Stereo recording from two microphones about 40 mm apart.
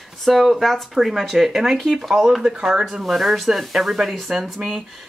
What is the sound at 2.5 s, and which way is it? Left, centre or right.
Speech, centre.